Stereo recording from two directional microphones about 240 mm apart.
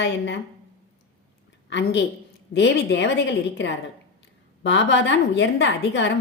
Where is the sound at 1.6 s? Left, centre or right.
Left.